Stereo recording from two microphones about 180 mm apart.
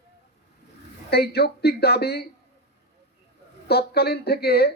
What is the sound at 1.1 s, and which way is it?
A man's voice, 65° left (ahead or behind).